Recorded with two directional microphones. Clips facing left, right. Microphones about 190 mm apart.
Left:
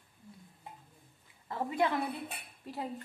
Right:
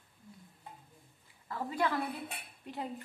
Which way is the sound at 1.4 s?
20° left (ahead or behind).